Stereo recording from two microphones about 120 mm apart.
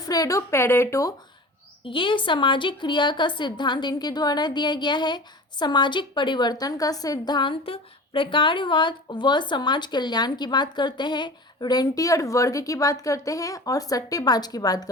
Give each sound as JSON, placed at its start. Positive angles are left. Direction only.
{"t": 0.0, "sound": "speech", "side_deg": 30}
{"t": 1.8, "sound": "a woman's voice", "side_deg": 45}